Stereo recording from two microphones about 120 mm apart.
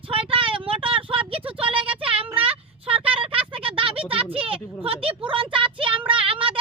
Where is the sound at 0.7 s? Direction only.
45° right (ahead or behind).